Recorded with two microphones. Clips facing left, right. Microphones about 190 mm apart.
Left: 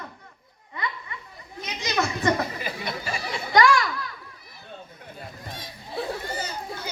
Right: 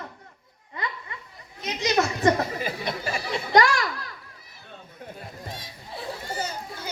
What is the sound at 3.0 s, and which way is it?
Chatter, 40° right (ahead or behind).